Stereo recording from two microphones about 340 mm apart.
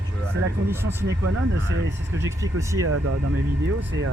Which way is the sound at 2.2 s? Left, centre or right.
Centre.